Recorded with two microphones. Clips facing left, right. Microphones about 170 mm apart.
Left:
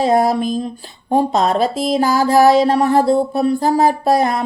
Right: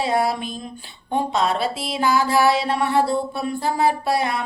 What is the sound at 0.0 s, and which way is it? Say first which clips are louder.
Mantra: left 7 dB; 40° left (ahead or behind).